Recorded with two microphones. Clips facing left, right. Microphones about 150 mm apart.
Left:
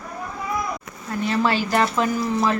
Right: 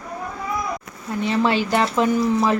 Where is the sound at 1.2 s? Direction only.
25° right (ahead or behind).